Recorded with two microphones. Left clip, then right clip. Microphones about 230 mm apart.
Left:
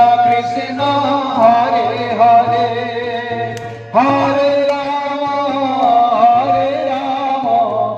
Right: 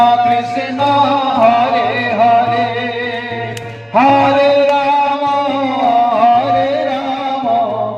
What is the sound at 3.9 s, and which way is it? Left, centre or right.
Music, right.